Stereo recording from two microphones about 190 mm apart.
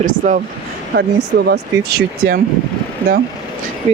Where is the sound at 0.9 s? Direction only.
60° right (ahead or behind).